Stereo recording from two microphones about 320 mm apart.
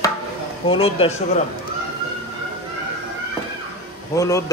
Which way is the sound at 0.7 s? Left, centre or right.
Centre.